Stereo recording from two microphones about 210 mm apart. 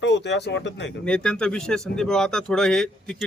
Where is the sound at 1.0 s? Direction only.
5° left (ahead or behind).